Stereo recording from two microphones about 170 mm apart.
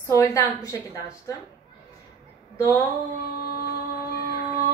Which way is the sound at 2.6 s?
10° left (ahead or behind).